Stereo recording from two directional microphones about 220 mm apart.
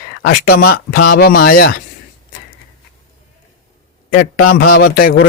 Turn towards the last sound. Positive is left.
turn(degrees=40)  # may be behind; listen again after turning